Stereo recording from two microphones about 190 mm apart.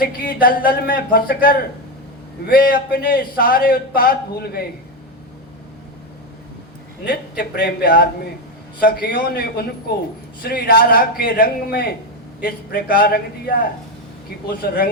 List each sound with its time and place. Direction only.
0.0 s a man's voice: 50° left (ahead or behind)
7.1 s a man's voice: 55° left (ahead or behind)
14.6 s a man's voice: 50° left (ahead or behind)